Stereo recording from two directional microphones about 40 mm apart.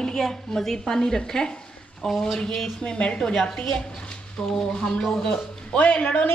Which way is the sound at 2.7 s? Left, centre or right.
Left.